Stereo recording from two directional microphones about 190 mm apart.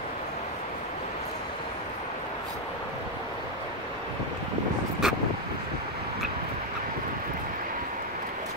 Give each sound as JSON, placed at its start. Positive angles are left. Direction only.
{"t": 5.0, "sound": "vehicle", "side_deg": -5}